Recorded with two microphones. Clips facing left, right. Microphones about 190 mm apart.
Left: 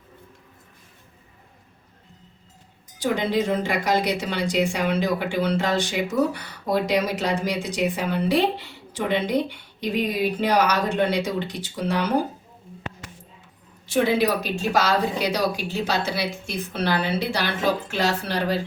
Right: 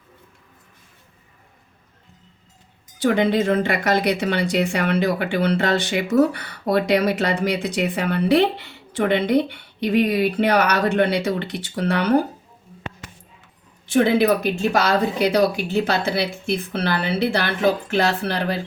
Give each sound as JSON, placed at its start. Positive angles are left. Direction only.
{"t": 3.0, "sound": "speech", "side_deg": -60}
{"t": 13.8, "sound": "speech", "side_deg": -55}